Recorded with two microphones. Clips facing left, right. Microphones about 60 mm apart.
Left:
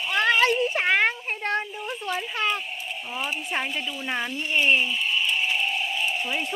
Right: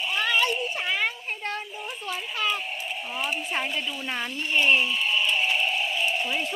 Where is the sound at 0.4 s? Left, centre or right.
Left.